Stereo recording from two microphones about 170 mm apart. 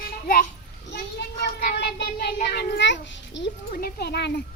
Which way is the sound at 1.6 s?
75° left (ahead or behind).